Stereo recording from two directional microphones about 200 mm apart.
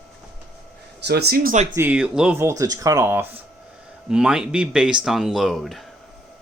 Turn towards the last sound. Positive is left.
turn(degrees=0)  # may be behind; listen again after turning